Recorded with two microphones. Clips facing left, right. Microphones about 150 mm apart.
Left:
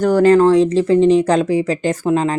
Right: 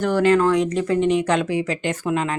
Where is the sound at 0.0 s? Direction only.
40° left (ahead or behind).